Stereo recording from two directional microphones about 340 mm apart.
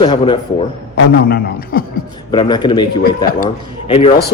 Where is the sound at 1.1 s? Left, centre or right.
Left.